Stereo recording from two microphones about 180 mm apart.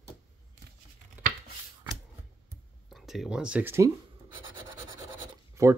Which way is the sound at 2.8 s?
Centre (ahead or behind).